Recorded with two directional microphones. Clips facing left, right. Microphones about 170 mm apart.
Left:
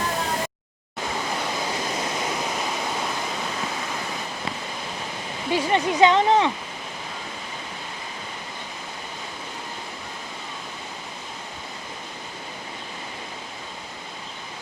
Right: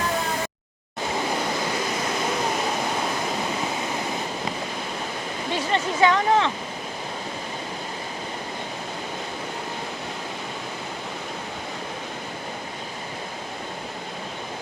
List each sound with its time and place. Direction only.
5.5 s speech: 15° left (ahead or behind)